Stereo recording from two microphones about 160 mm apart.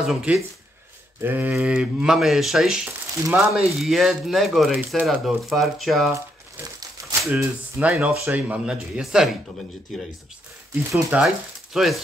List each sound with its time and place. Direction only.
0.0 s speech: 5° right (ahead or behind)
6.1 s crumpling: 20° right (ahead or behind)
7.8 s speech: 10° right (ahead or behind)
10.7 s speech: 10° right (ahead or behind)